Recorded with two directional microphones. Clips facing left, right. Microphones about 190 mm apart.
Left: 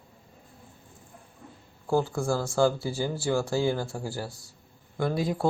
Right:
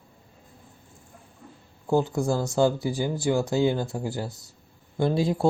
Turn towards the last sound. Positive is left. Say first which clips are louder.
# right 4 dB
turn(degrees=-25)  # may be behind; listen again after turning